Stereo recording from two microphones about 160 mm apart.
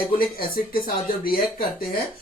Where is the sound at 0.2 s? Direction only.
65° left (ahead or behind).